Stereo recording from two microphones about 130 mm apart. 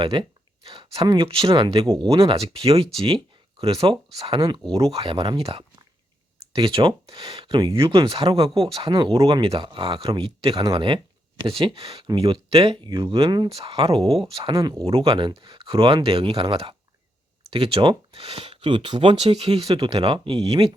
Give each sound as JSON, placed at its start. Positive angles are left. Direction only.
{"t": 0.0, "sound": "speech", "side_deg": -40}
{"t": 14.6, "sound": "speech", "side_deg": -30}
{"t": 14.8, "sound": "speech", "side_deg": -45}